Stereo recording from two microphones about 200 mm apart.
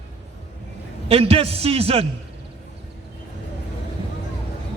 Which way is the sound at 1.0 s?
30° right (ahead or behind).